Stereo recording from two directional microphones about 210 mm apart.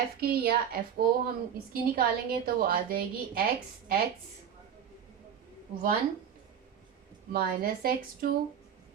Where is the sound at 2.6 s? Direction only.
45° right (ahead or behind).